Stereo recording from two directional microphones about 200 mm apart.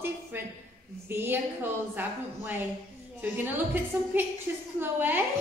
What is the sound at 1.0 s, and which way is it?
A woman's voice, 10° right (ahead or behind).